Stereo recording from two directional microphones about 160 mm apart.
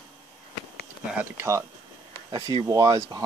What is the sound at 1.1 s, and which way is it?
Speech, 15° right (ahead or behind).